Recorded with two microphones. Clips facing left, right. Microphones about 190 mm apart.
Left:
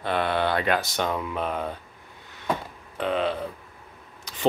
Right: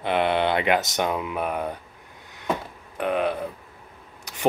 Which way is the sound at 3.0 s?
10° right (ahead or behind).